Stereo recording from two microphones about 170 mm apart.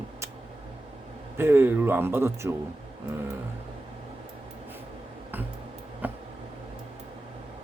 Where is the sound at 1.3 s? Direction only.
15° right (ahead or behind).